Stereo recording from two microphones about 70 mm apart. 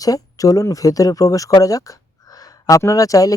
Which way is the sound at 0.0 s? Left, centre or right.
Left.